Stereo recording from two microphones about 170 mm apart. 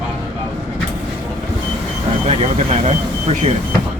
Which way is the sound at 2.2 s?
35° right (ahead or behind).